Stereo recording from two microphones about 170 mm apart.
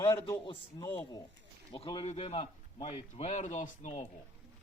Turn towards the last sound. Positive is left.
turn(degrees=45)  # may be behind; listen again after turning